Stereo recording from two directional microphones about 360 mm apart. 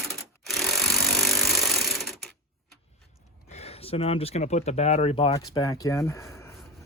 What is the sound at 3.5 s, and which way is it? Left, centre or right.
Speech, centre.